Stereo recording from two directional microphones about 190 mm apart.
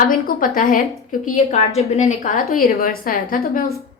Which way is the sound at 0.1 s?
45° left (ahead or behind).